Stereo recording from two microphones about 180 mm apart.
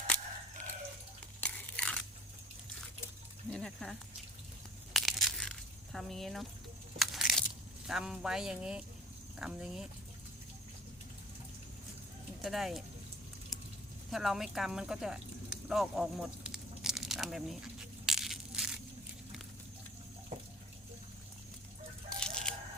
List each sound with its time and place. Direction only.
1.4 s biting: 10° left (ahead or behind)
3.5 s a sound: 5° left (ahead or behind)
4.9 s a sound: centre (ahead or behind)
7.0 s crushing: centre (ahead or behind)
7.9 s speech: 5° right (ahead or behind)
12.4 s speech: centre (ahead or behind)
14.1 s speech: centre (ahead or behind)
18.0 s crushing: centre (ahead or behind)
20.3 s water tap: 40° right (ahead or behind)
22.2 s a sound: 5° left (ahead or behind)